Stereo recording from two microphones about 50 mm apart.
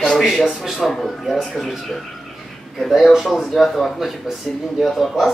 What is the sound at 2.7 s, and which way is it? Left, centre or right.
Speech, centre.